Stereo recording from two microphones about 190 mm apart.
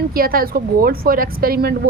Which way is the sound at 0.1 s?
50° right (ahead or behind).